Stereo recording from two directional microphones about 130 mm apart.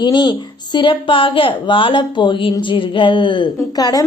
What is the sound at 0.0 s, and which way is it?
A woman's voice, 35° left (ahead or behind).